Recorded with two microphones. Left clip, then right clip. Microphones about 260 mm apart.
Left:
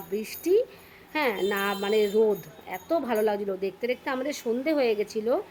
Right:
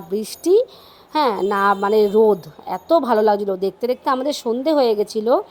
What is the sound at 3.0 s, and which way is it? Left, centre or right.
Speech, right.